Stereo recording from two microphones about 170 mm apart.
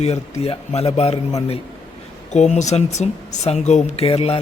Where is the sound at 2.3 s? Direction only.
45° left (ahead or behind).